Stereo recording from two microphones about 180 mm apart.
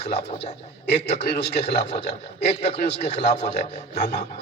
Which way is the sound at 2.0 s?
35° left (ahead or behind).